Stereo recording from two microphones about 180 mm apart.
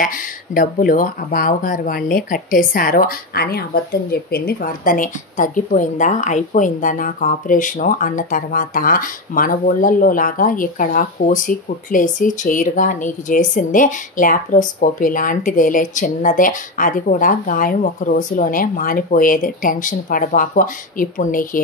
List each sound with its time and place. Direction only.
0.0 s a woman's voice: 50° left (ahead or behind)